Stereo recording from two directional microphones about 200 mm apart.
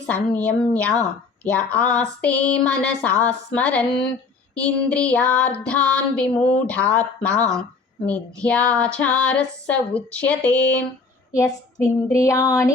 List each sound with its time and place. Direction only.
0.1 s female singing: 5° left (ahead or behind)
4.6 s child singing: 5° left (ahead or behind)
6.7 s female singing: 5° left (ahead or behind)